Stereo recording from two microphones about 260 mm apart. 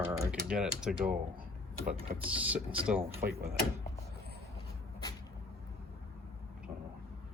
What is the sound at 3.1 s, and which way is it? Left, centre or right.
Speech, right.